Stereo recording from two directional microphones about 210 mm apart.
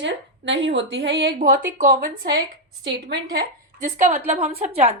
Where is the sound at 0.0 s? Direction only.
60° right (ahead or behind); by 2.4 s 40° right (ahead or behind).